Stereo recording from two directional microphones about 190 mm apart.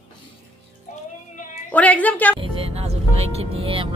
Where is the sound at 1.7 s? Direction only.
5° left (ahead or behind).